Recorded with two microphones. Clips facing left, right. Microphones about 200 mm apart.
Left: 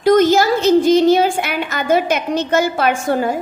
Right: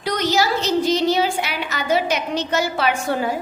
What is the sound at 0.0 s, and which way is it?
A woman's voice, 50° left (ahead or behind).